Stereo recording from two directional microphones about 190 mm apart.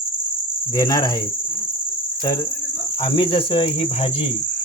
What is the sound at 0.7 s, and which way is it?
Cricket, 20° left (ahead or behind).